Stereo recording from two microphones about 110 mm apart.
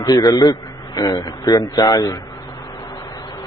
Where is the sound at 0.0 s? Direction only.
35° left (ahead or behind).